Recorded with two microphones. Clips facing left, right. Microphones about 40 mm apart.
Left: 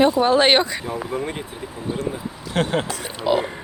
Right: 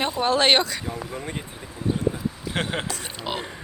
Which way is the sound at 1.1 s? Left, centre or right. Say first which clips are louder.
Left 7 dB; left.